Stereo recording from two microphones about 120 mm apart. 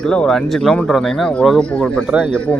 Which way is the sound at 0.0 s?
5° left (ahead or behind).